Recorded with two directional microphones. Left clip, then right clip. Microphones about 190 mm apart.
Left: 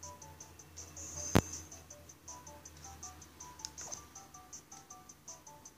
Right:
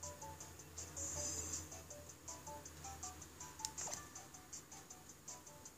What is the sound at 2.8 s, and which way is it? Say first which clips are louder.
Music: left 2 dB; 20° right (ahead or behind).